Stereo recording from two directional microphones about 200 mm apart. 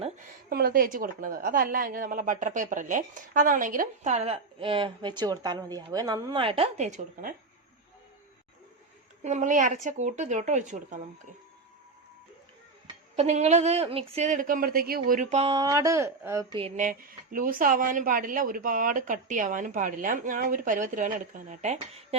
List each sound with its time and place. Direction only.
0.5 s a woman's voice: 45° right (ahead or behind)
9.2 s a woman's voice: 35° right (ahead or behind)
13.1 s a woman's voice: 35° right (ahead or behind)
15.5 s speech: 20° right (ahead or behind)
16.6 s speech: 30° right (ahead or behind)
16.8 s a woman's voice: 45° right (ahead or behind)